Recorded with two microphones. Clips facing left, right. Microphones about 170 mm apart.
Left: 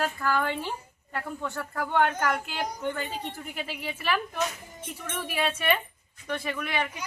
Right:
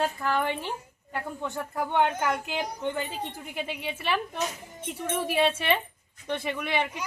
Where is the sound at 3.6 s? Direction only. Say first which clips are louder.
Even; 25° right (ahead or behind).